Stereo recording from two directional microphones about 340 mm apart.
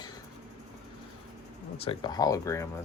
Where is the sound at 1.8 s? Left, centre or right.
Centre.